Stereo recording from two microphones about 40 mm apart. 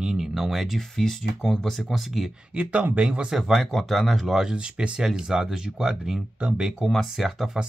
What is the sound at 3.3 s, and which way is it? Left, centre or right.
Speech, centre.